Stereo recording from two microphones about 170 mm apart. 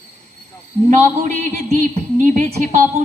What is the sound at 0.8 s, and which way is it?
A man's voice, 45° right (ahead or behind).